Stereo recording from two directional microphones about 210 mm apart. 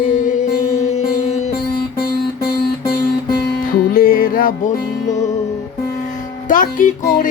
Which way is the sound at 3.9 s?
45° left (ahead or behind).